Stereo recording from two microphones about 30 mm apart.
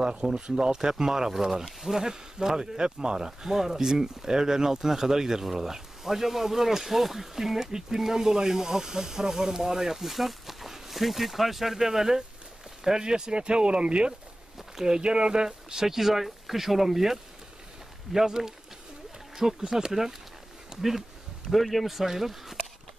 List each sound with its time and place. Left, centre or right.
0.0 s speech: right; by 2.0 s centre
2.0 s speech: centre
10.0 s speech: centre
20.7 s a sound: centre
21.5 s a man's voice: centre
21.9 s speech: centre